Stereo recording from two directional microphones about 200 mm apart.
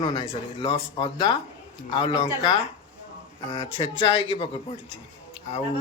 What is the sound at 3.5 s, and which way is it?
Speech, 25° left (ahead or behind).